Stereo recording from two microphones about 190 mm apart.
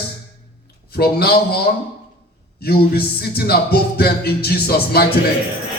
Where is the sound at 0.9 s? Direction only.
55° left (ahead or behind).